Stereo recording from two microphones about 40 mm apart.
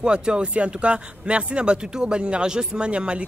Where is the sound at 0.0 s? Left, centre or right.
Right.